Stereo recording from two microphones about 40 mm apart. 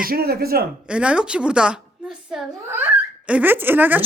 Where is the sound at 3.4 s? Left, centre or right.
Right.